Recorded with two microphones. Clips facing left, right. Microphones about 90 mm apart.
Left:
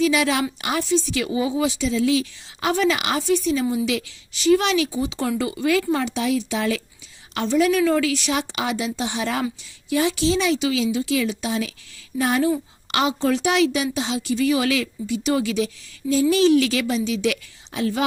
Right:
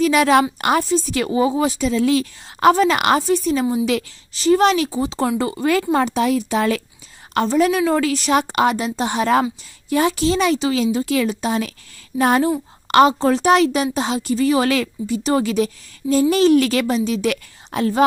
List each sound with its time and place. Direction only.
0.0 s a woman's voice: 50° right (ahead or behind)
3.2 s a woman's voice: 40° right (ahead or behind)